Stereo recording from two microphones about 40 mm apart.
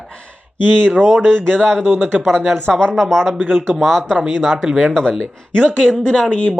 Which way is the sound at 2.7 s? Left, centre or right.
Centre.